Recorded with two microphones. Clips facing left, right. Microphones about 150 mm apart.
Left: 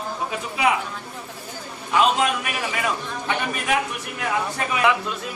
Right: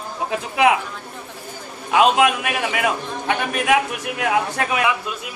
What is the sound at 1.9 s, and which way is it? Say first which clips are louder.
A man's voice: right 4 dB; 70° right (ahead or behind).